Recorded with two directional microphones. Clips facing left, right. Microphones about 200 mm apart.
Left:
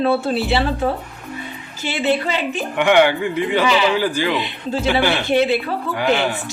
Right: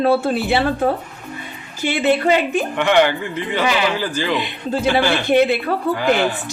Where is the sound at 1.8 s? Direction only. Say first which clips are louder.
Right 3 dB; 55° right (ahead or behind).